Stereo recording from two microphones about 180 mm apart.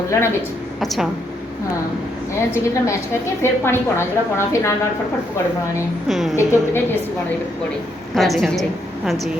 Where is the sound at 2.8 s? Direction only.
15° left (ahead or behind).